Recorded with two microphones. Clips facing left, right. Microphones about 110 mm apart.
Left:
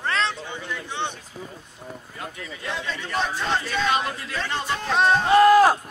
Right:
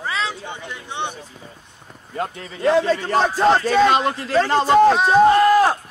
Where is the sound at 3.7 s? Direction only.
75° right (ahead or behind).